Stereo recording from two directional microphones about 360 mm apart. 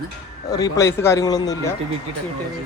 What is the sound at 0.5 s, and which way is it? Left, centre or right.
Speech, centre.